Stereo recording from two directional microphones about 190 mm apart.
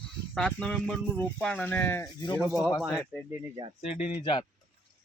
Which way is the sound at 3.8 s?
35° left (ahead or behind).